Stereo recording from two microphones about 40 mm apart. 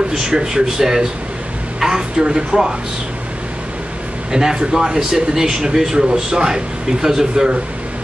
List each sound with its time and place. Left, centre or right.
0.3 s speech: centre
4.3 s speech: centre